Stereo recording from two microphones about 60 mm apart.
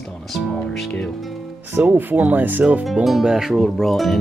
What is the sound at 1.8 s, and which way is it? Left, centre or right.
Speech, right.